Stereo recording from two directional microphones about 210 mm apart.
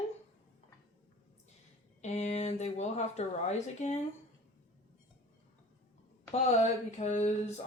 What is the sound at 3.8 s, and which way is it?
Speech, 35° left (ahead or behind).